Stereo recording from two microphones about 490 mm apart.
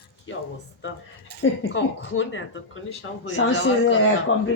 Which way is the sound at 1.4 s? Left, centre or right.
Left.